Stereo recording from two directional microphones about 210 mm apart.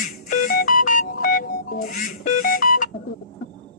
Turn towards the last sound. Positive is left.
turn(degrees=40)  # may be behind; listen again after turning